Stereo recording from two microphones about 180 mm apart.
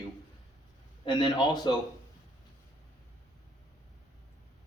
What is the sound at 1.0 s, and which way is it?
Speech, 25° left (ahead or behind).